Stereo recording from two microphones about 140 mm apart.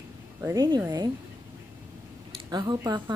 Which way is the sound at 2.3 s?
30° right (ahead or behind).